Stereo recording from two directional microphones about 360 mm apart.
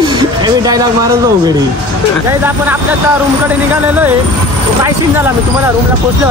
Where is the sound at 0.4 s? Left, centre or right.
Centre.